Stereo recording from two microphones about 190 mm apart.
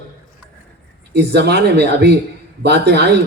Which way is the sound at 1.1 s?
60° right (ahead or behind).